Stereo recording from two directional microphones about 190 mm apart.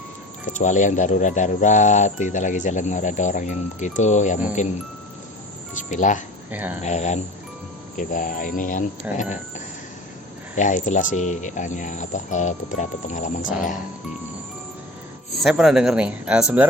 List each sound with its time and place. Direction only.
0.4 s speech: 40° left (ahead or behind)
5.7 s speech: 40° left (ahead or behind)
6.5 s speech: 10° right (ahead or behind)
6.8 s speech: 35° left (ahead or behind)
9.1 s speech: 5° right (ahead or behind)
10.5 s speech: 40° left (ahead or behind)
15.4 s speech: centre (ahead or behind)